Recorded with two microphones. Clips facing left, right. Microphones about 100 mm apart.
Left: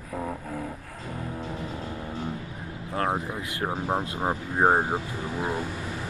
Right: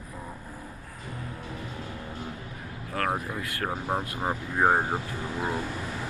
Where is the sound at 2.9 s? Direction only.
25° left (ahead or behind).